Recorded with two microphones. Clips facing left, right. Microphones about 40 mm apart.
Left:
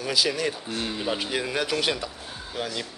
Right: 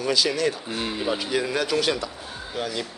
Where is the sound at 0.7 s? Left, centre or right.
Centre.